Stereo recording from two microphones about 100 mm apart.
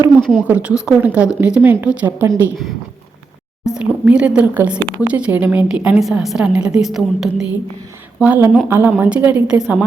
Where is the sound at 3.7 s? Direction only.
10° right (ahead or behind).